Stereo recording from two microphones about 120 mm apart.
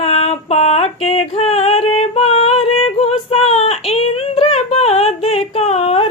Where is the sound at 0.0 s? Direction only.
60° left (ahead or behind).